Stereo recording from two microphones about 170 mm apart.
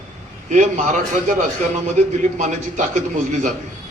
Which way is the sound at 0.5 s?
45° right (ahead or behind).